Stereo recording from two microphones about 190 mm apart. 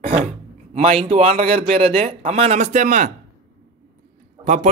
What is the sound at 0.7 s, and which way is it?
A man's voice, 30° right (ahead or behind).